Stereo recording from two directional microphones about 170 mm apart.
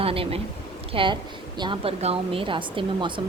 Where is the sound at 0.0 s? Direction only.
35° right (ahead or behind).